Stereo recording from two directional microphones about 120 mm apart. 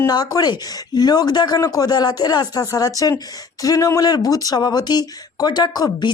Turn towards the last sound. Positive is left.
turn(degrees=35)  # may be behind; listen again after turning